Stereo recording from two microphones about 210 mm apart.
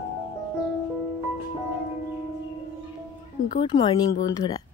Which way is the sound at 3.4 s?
25° left (ahead or behind).